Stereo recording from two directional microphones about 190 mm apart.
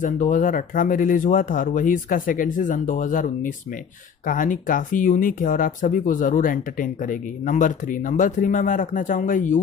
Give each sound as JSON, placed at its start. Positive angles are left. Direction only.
{"t": 0.0, "sound": "speech", "side_deg": 45}